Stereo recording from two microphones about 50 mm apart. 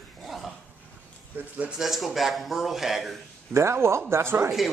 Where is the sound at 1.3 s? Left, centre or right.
Right.